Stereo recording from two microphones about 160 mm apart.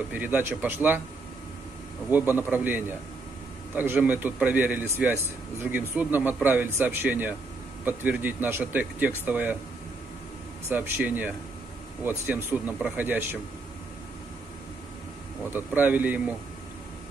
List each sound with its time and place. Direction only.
0.1 s a man's voice: 10° right (ahead or behind)
2.0 s a man's voice: 10° right (ahead or behind)
10.7 s a man's voice: 10° right (ahead or behind)
15.5 s a man's voice: 10° right (ahead or behind)